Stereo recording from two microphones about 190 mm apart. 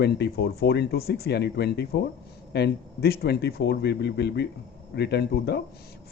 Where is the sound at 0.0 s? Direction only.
60° left (ahead or behind).